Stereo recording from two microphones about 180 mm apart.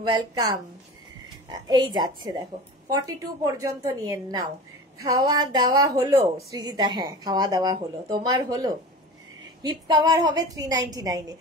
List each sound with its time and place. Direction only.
0.1 s a woman's voice: 20° right (ahead or behind)
1.5 s a woman's voice: 25° right (ahead or behind)